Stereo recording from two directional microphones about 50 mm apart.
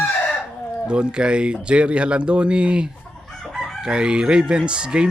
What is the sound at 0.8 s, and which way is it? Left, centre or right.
Speech, centre.